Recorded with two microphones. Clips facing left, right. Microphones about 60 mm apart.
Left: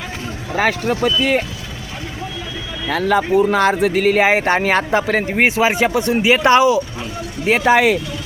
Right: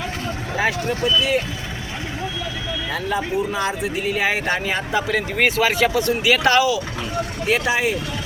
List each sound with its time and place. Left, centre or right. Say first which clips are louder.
0.5 s speech: left 5 dB; left
2.9 s speech: left 9 dB; left
4.2 s speech: left 7 dB; left
5.3 s speech: left 3 dB; left